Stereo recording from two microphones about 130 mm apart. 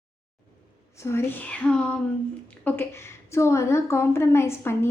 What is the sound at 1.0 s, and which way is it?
A woman's voice, 15° left (ahead or behind).